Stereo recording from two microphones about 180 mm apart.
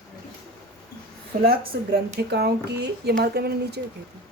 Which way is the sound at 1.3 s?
55° right (ahead or behind).